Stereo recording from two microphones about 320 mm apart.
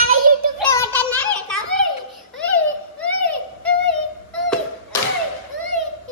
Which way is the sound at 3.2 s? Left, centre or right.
Centre.